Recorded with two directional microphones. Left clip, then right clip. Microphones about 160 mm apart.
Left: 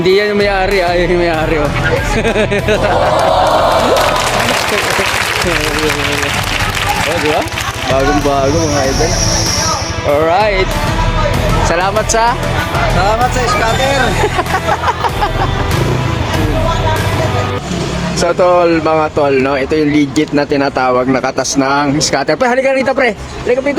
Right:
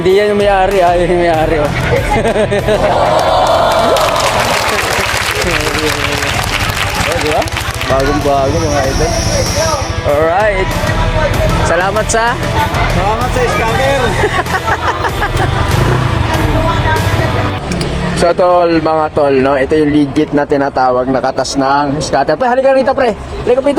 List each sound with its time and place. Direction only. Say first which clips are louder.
0.0 s speech: right 1 dB; 35° left (ahead or behind)
3.2 s applause: even; centre (ahead or behind)
10.2 s speech: even; 25° left (ahead or behind)
11.8 s speech: even; 15° left (ahead or behind)
18.3 s speech: even; 5° left (ahead or behind)